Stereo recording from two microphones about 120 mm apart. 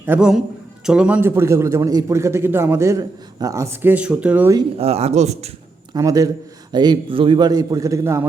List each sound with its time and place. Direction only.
0.2 s a man's voice: 5° right (ahead or behind)
4.8 s a man's voice: 60° right (ahead or behind)
5.9 s a man's voice: 30° right (ahead or behind)